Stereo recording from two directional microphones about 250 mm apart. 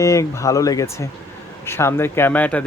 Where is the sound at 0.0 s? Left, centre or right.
Centre.